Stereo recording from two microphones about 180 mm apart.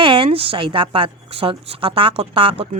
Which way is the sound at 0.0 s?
30° right (ahead or behind).